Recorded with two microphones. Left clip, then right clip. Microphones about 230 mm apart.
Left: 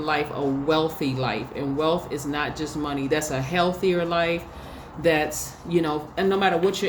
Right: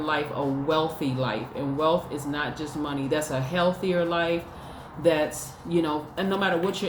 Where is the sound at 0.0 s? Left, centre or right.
Left.